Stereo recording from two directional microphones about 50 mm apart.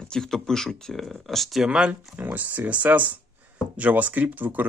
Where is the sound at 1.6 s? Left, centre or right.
Centre.